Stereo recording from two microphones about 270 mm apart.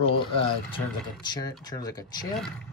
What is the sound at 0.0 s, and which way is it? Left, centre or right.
Speech, centre.